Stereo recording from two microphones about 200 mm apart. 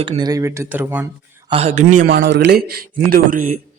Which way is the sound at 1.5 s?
30° right (ahead or behind).